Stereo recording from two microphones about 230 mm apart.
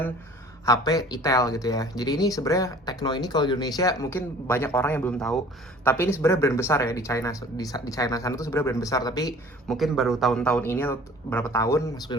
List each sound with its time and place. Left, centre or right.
0.6 s speech: centre
9.6 s speech: centre